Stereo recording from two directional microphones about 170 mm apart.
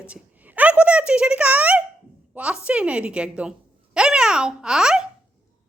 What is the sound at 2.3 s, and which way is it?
A woman's voice, 5° right (ahead or behind).